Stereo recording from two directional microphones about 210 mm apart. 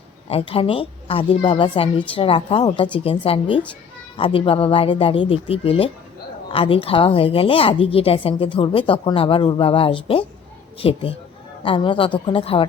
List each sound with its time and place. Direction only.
0.3 s a woman's voice: 25° left (ahead or behind)